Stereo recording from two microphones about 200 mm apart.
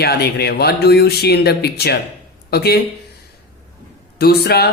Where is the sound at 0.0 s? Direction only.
50° left (ahead or behind).